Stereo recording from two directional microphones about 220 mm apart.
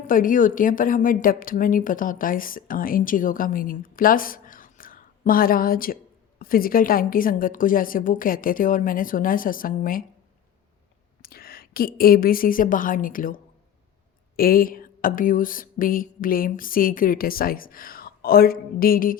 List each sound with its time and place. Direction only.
0.1 s a woman's voice: 40° left (ahead or behind)
11.2 s a woman's voice: 45° left (ahead or behind)